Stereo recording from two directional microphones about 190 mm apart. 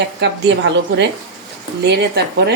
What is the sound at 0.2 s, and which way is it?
A woman's voice, 65° right (ahead or behind).